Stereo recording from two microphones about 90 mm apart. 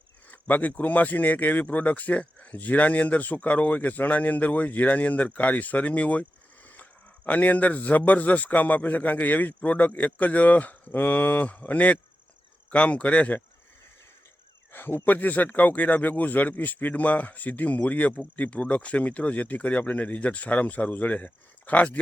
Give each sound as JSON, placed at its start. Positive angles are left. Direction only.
{"t": 0.3, "sound": "speech", "side_deg": 20}
{"t": 7.3, "sound": "a man's voice", "side_deg": 15}
{"t": 14.7, "sound": "speech", "side_deg": 25}